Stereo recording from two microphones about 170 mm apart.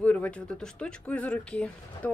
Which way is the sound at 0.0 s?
10° left (ahead or behind).